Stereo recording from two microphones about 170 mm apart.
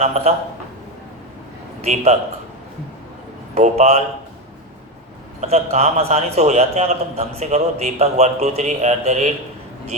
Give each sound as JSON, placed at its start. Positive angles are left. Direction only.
{"t": 0.0, "sound": "a man's voice", "side_deg": -40}
{"t": 1.8, "sound": "a man's voice", "side_deg": -40}
{"t": 3.5, "sound": "a man's voice", "side_deg": -40}
{"t": 5.4, "sound": "a man's voice", "side_deg": -40}